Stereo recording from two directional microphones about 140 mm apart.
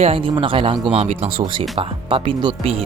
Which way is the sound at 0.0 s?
40° right (ahead or behind).